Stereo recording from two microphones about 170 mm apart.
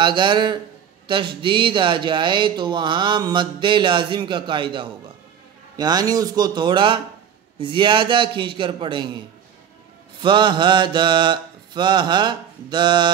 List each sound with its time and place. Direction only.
0.0 s speech: 30° right (ahead or behind)
10.2 s speech: 30° right (ahead or behind)